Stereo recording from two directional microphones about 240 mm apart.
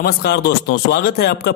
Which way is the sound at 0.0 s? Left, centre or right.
Left.